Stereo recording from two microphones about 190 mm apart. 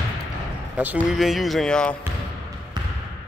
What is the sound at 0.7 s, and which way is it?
Speech, 10° right (ahead or behind).